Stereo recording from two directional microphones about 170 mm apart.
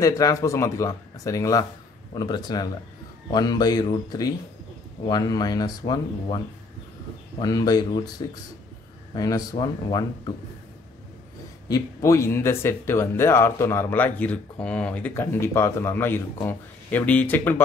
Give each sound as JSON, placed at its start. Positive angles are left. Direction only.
{"t": 0.0, "sound": "speech", "side_deg": 20}
{"t": 9.1, "sound": "speech", "side_deg": 20}
{"t": 11.7, "sound": "speech", "side_deg": 20}